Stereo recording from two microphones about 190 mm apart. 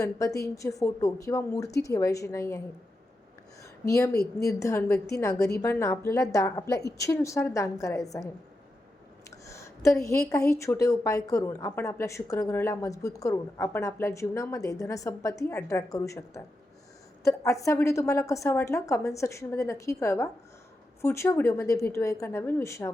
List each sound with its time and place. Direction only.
0.0 s a woman's voice: 15° left (ahead or behind)
3.6 s a sound: 15° left (ahead or behind)
4.4 s a woman's voice: 15° left (ahead or behind)
9.3 s a woman's voice: 15° left (ahead or behind)